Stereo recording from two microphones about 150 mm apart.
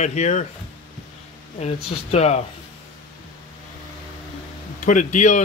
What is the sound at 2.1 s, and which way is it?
Speech, 45° left (ahead or behind).